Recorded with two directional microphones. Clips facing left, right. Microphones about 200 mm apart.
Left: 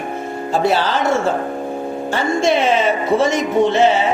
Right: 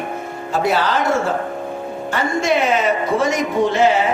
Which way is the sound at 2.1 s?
30° left (ahead or behind).